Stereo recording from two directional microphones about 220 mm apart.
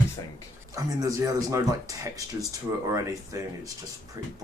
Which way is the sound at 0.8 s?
15° right (ahead or behind).